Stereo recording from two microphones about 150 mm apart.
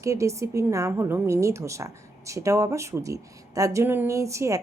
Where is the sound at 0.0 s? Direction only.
20° right (ahead or behind).